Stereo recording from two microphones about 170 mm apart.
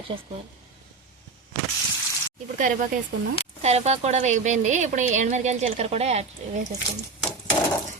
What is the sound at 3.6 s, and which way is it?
Speech, 40° right (ahead or behind).